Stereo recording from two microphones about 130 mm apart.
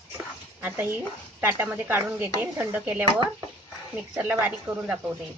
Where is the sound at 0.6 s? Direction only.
15° right (ahead or behind).